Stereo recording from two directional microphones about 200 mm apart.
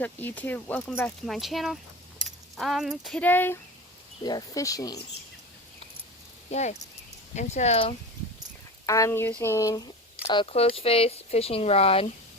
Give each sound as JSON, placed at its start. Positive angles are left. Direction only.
{"t": 0.0, "sound": "speech", "side_deg": 10}
{"t": 2.2, "sound": "keys jangling", "side_deg": 0}
{"t": 4.2, "sound": "speech", "side_deg": 20}
{"t": 6.5, "sound": "speech", "side_deg": 35}
{"t": 8.9, "sound": "speech", "side_deg": 15}